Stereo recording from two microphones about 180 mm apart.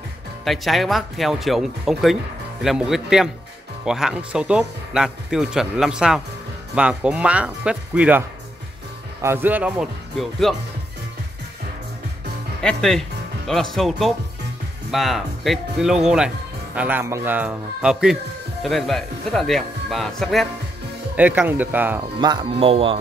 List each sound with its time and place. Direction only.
0.5 s speech: centre (ahead or behind)
9.2 s speech: 10° right (ahead or behind)
12.6 s speech: 5° left (ahead or behind)
21.2 s speech: 10° right (ahead or behind)
22.2 s speech: 25° right (ahead or behind)